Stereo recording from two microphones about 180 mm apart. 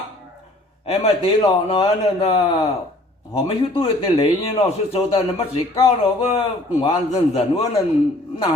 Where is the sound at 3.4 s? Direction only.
30° left (ahead or behind).